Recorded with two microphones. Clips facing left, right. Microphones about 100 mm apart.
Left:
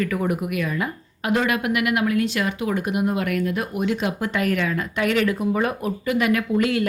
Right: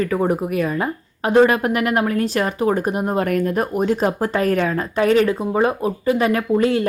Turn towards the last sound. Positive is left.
turn(degrees=-30)  # may be behind; listen again after turning